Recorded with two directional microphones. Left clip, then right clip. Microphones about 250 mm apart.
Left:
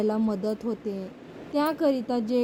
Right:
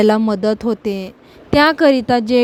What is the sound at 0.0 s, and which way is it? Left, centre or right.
A woman's voice, right.